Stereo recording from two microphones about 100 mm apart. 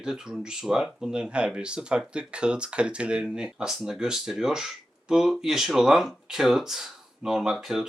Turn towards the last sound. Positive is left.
turn(degrees=-5)  # may be behind; listen again after turning